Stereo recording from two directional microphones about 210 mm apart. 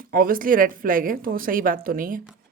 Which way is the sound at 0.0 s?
45° right (ahead or behind).